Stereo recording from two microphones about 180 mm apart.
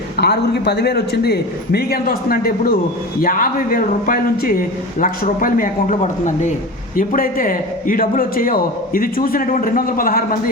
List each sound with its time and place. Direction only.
0.2 s a man's voice: 65° left (ahead or behind)